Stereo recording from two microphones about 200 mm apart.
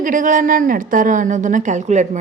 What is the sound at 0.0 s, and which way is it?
A woman's voice, 40° right (ahead or behind).